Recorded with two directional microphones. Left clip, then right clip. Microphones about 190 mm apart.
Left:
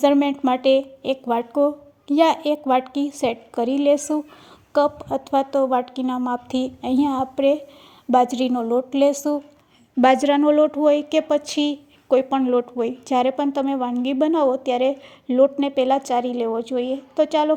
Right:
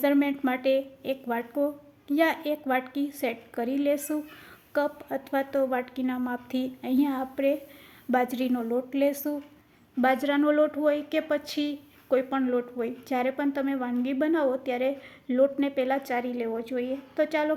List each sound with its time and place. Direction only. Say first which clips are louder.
0.0 s a woman's voice: left 7 dB; 30° left (ahead or behind)